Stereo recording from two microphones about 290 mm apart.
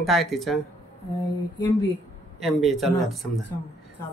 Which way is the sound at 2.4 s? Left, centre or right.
Centre.